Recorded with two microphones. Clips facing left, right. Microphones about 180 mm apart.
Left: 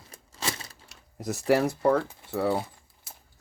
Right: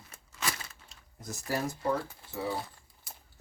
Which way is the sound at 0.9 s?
70° left (ahead or behind).